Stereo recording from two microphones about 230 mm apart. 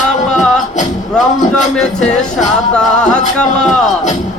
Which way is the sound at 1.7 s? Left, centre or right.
Centre.